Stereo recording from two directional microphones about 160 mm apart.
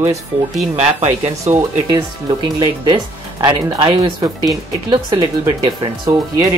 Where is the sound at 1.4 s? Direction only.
20° right (ahead or behind).